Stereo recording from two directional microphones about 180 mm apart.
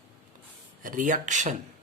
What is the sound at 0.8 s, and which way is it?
Speech, 45° right (ahead or behind).